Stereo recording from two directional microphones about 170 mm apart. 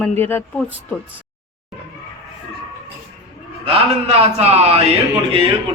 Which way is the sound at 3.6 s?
35° right (ahead or behind).